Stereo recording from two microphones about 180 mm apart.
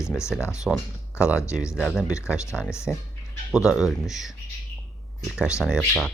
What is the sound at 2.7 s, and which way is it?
Speech, 15° left (ahead or behind).